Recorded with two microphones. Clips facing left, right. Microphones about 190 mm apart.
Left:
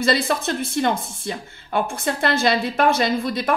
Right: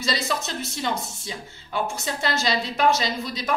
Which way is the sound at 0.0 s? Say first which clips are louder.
Left 7 dB; 55° left (ahead or behind).